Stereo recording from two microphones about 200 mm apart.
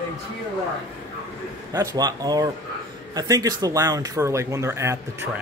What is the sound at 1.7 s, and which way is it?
Speech, 20° right (ahead or behind).